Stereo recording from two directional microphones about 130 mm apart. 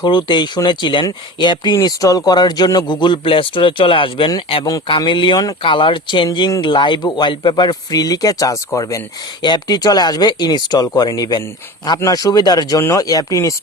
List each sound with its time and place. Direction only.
0.0 s speech: 35° left (ahead or behind)